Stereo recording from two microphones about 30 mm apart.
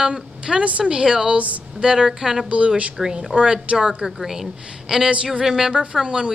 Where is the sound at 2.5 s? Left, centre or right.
Right.